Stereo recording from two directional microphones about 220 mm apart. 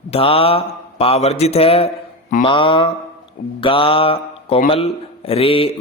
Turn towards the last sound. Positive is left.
turn(degrees=25)  # may be behind; listen again after turning